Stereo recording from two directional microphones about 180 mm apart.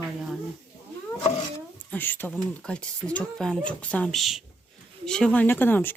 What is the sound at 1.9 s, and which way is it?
Speech, 10° left (ahead or behind).